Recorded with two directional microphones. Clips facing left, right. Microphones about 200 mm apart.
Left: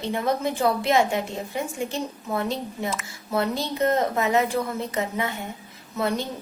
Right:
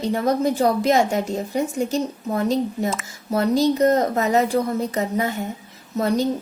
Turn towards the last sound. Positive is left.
turn(degrees=-40)  # may be behind; listen again after turning